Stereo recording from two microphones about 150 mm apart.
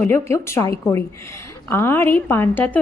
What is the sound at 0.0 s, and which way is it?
A woman's voice, 15° left (ahead or behind).